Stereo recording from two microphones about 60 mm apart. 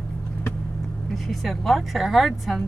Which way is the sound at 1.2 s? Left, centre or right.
Centre.